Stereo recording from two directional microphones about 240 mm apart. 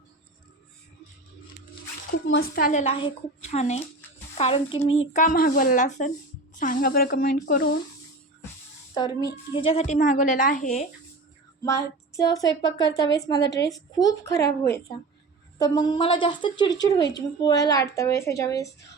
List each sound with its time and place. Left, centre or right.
2.3 s a woman's voice: left
9.0 s a woman's voice: centre
11.6 s a woman's voice: centre